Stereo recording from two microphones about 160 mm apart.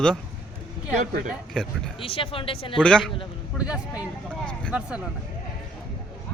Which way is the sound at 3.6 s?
5° right (ahead or behind).